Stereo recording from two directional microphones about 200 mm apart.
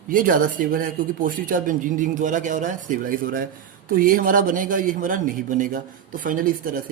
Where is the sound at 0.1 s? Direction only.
45° right (ahead or behind).